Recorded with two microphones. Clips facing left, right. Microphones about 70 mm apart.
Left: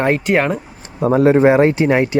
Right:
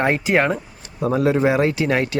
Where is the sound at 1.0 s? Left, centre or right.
Left.